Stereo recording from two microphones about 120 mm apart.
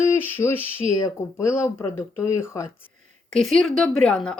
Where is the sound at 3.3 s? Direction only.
5° left (ahead or behind).